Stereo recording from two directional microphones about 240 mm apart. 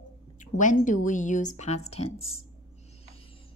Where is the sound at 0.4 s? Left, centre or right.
Left.